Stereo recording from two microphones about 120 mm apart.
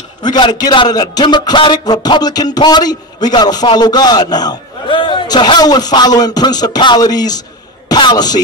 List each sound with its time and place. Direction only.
0.2 s a man's voice: 35° left (ahead or behind)